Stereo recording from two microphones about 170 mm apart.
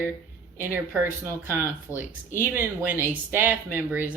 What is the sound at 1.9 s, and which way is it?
Speech, 15° left (ahead or behind).